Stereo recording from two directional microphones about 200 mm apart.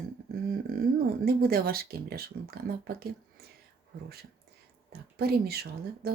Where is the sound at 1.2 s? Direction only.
50° right (ahead or behind).